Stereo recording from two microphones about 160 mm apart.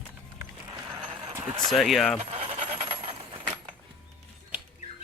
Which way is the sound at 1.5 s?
30° right (ahead or behind).